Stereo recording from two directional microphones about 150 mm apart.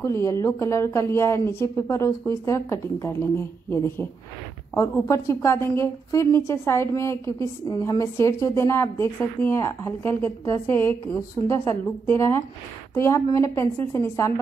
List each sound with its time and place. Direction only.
0.0 s a woman's voice: 20° left (ahead or behind)